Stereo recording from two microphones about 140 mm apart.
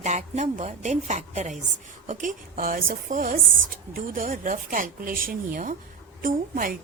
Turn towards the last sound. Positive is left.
turn(degrees=-90)